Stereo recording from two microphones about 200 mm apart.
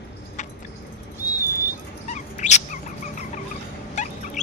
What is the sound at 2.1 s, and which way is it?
Dog, 35° left (ahead or behind).